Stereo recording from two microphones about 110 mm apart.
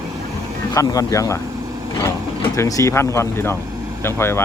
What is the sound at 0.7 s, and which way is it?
Speech, 35° left (ahead or behind).